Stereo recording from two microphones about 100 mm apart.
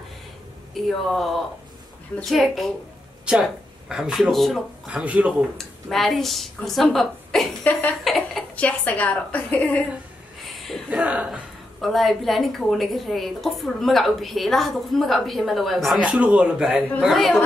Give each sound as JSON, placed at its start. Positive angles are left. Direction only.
{"t": 0.7, "sound": "a woman's voice", "side_deg": 0}
{"t": 4.8, "sound": "speech", "side_deg": -10}
{"t": 5.6, "sound": "a woman's voice", "side_deg": 0}
{"t": 7.7, "sound": "a woman's voice", "side_deg": 15}
{"t": 8.0, "sound": "a sound", "side_deg": 0}
{"t": 8.5, "sound": "a woman's voice", "side_deg": 15}
{"t": 10.4, "sound": "a sound", "side_deg": 0}
{"t": 10.9, "sound": "speech", "side_deg": -15}
{"t": 11.8, "sound": "a woman's voice", "side_deg": 0}
{"t": 16.0, "sound": "a woman's voice", "side_deg": -10}